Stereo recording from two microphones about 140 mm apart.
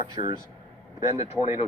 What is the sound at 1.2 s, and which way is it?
Speech, 50° left (ahead or behind).